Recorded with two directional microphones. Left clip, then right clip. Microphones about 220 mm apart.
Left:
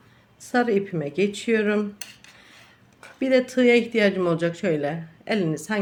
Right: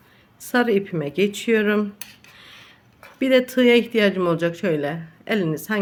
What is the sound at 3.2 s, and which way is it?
Speech, 15° right (ahead or behind).